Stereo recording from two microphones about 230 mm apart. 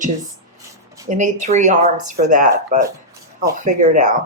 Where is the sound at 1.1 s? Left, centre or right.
Right.